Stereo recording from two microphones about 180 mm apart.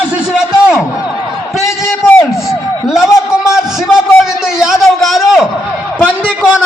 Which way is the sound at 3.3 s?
5° right (ahead or behind).